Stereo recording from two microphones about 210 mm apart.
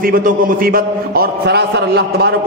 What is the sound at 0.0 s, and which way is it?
A man's voice, 45° right (ahead or behind).